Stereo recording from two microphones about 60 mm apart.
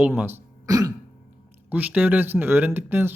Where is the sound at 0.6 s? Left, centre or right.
Right.